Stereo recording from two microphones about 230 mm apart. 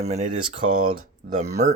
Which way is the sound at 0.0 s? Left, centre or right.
Right.